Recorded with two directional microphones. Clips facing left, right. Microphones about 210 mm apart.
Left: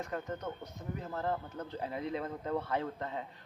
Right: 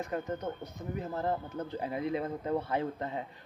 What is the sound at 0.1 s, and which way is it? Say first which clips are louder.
Speech: right 4 dB; 15° right (ahead or behind).